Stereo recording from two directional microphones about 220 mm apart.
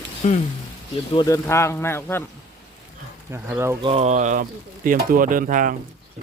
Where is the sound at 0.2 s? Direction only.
35° left (ahead or behind).